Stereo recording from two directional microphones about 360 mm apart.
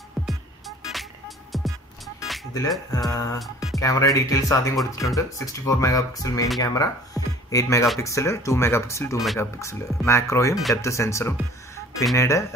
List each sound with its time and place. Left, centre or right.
0.3 s music: centre
3.8 s speech: centre
7.2 s music: centre
7.5 s speech: centre